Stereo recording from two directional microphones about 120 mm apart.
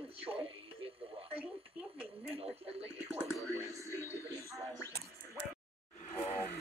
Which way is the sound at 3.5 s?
25° right (ahead or behind).